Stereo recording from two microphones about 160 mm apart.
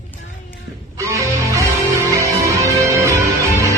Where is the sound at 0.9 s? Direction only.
20° right (ahead or behind).